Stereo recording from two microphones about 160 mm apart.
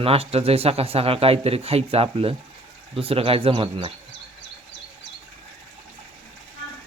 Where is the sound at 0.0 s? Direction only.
40° right (ahead or behind).